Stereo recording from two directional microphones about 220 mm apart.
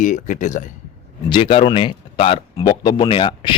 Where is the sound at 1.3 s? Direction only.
25° left (ahead or behind).